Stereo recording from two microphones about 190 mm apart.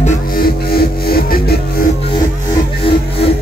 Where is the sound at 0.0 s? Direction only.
45° left (ahead or behind).